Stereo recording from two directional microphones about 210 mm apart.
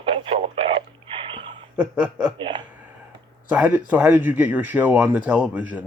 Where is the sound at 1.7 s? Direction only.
5° right (ahead or behind).